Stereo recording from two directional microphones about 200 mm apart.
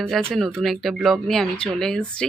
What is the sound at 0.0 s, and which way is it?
Speech, 5° left (ahead or behind).